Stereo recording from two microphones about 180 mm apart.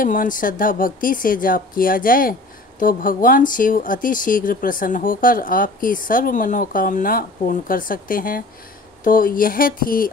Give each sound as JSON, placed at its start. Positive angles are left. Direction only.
{"t": 0.0, "sound": "speech", "side_deg": 50}